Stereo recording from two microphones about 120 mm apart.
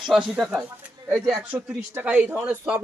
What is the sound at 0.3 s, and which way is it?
Speech, centre (ahead or behind).